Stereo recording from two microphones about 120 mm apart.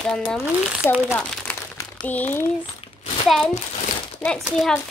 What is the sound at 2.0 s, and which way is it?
Speech, 15° left (ahead or behind).